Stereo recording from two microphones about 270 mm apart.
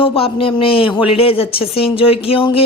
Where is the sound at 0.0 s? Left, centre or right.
Left.